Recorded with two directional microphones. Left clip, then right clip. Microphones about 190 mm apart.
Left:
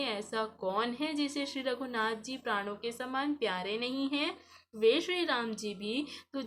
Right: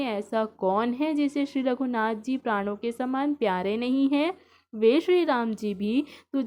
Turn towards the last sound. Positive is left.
turn(degrees=-45)  # may be behind; listen again after turning